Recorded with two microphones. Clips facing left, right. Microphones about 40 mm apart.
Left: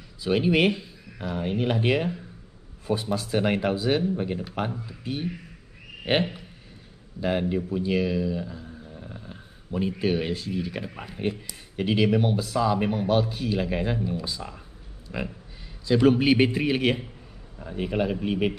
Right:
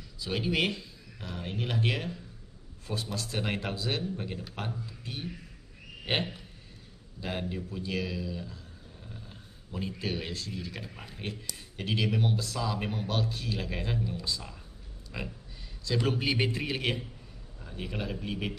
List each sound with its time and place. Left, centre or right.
0.2 s speech: centre
8.6 s a sound: left
9.1 s speech: left